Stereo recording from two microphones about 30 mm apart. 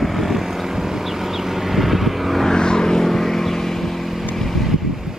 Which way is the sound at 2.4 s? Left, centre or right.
Left.